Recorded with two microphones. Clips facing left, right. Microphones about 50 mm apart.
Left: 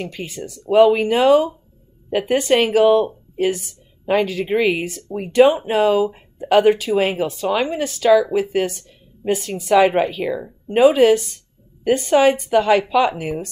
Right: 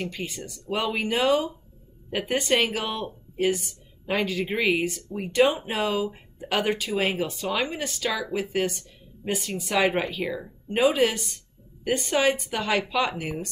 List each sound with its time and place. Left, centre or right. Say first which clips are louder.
0.2 s a woman's voice: left 5 dB; centre
8.2 s a woman's voice: left 8 dB; centre
9.3 s speech: left 8 dB; centre
9.7 s a woman's voice: left 9 dB; centre